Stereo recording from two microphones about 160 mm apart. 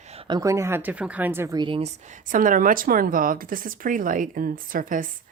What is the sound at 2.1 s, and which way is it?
Speech, 55° right (ahead or behind).